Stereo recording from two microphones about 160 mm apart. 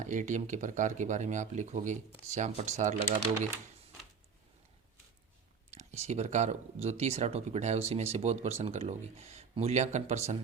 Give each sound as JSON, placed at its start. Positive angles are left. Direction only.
{"t": 0.0, "sound": "speech", "side_deg": -50}
{"t": 5.7, "sound": "speech", "side_deg": -45}